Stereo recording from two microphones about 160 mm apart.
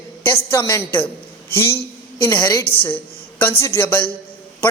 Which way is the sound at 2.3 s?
15° left (ahead or behind).